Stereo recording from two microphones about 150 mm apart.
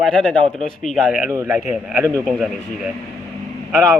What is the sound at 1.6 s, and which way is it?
A man's voice, 5° right (ahead or behind).